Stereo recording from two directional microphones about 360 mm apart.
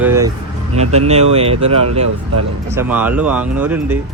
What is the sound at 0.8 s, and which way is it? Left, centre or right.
Speech, centre.